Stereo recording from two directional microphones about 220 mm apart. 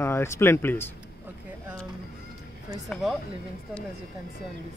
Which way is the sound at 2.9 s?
Centre (ahead or behind).